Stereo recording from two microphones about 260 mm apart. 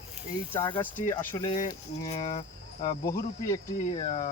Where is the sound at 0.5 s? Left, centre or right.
Centre.